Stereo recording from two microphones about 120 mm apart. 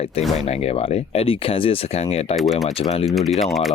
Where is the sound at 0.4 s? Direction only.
60° left (ahead or behind).